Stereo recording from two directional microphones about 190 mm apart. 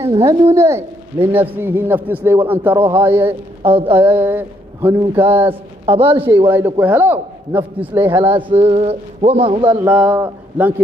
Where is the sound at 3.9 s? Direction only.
10° right (ahead or behind).